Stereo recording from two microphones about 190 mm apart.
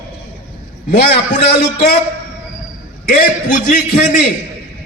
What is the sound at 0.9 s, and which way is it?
A man's voice, 50° left (ahead or behind).